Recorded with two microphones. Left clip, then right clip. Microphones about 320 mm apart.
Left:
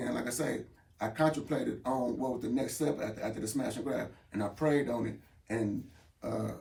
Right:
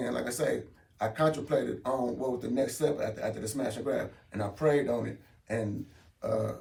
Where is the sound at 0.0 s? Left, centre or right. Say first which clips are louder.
Right 4 dB; centre.